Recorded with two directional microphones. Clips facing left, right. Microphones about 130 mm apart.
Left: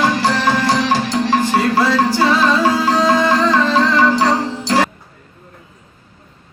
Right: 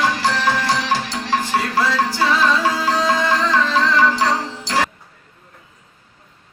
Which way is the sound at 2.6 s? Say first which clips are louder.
Left 5 dB; 40° left (ahead or behind).